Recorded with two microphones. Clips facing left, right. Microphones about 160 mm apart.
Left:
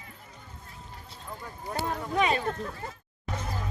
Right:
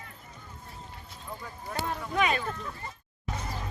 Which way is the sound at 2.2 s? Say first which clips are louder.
Left 1 dB; 30° left (ahead or behind).